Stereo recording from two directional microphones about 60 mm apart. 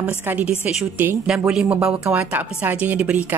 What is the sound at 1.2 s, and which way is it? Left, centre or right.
Speech, centre.